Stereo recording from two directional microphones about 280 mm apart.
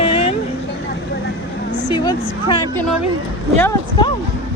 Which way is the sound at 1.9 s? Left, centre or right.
Centre.